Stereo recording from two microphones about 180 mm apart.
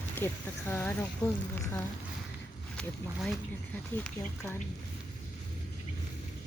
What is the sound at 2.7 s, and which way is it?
Speech, 5° left (ahead or behind).